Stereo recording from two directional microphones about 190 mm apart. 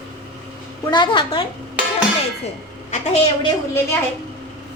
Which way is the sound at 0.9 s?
25° left (ahead or behind).